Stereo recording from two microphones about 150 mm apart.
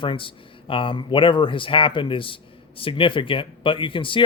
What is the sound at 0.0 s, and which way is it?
Speech, 35° left (ahead or behind).